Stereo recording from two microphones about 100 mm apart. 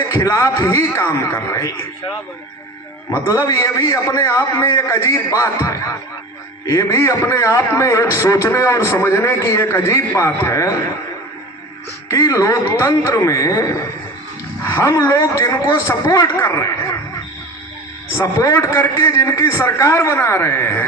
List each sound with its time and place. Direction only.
0.1 s a man's voice: 30° left (ahead or behind)
3.2 s a man's voice: 30° left (ahead or behind)
12.0 s a man's voice: 35° left (ahead or behind)
18.3 s a man's voice: 30° left (ahead or behind)